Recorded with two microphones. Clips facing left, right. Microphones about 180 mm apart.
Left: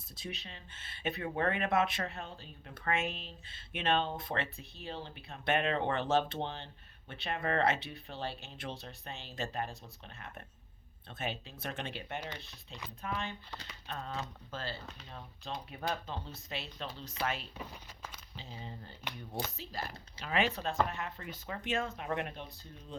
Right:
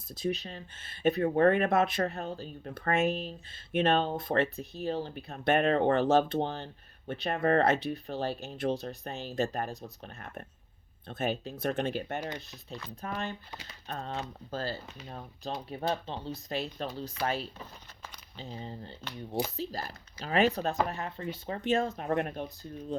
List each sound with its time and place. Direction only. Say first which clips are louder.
0.2 s speech: right 12 dB; 40° right (ahead or behind)